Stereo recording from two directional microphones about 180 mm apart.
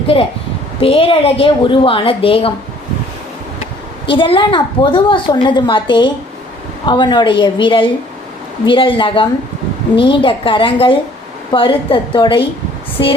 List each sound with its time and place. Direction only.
0.1 s a woman's voice: 30° left (ahead or behind)
4.0 s a woman's voice: 30° left (ahead or behind)